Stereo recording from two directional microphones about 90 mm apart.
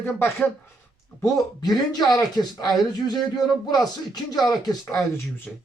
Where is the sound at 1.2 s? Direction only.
40° left (ahead or behind).